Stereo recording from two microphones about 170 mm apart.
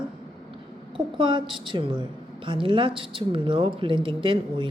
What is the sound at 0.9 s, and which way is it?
A woman's voice, 30° right (ahead or behind).